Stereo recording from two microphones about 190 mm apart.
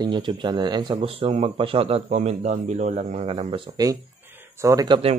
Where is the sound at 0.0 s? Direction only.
25° right (ahead or behind).